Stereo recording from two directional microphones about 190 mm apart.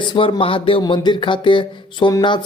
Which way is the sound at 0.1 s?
25° left (ahead or behind).